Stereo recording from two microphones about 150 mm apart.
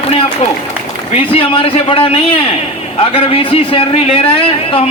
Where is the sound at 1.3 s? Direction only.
35° left (ahead or behind).